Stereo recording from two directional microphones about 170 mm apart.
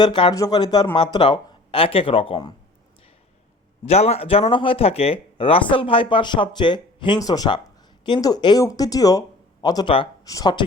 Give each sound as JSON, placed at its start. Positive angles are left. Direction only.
{"t": 0.0, "sound": "speech", "side_deg": 30}
{"t": 3.8, "sound": "speech", "side_deg": 40}